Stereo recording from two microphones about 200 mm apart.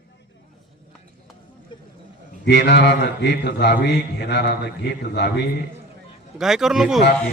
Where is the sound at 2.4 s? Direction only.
60° left (ahead or behind).